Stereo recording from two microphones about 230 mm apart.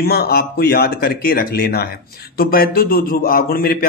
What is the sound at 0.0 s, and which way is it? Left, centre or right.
A man's voice, left.